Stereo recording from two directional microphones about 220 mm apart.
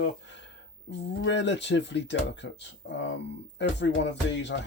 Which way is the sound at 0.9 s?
55° left (ahead or behind).